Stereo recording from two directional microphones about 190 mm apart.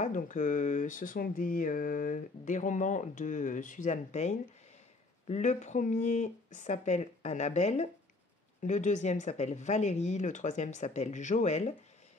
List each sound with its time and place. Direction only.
0.0 s speech: 40° left (ahead or behind)